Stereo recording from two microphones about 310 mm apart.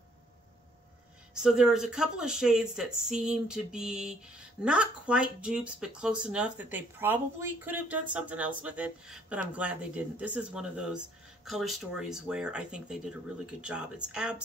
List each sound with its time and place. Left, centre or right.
1.3 s speech: centre